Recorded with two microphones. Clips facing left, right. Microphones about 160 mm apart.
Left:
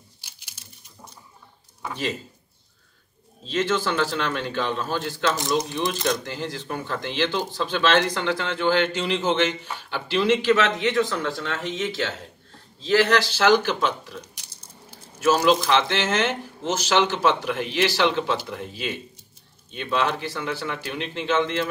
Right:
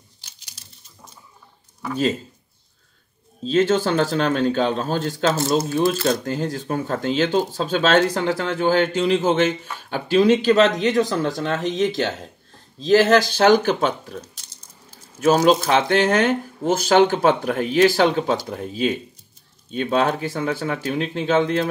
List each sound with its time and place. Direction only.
3.6 s speech: 45° right (ahead or behind)
15.2 s speech: 50° right (ahead or behind)